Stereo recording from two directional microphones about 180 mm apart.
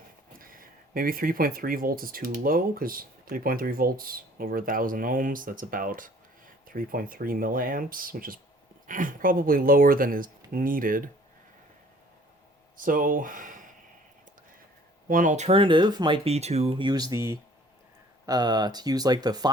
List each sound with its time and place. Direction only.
0.3 s speech: 50° right (ahead or behind)
12.7 s speech: 50° right (ahead or behind)
15.1 s speech: 45° right (ahead or behind); by 19.5 s 20° right (ahead or behind)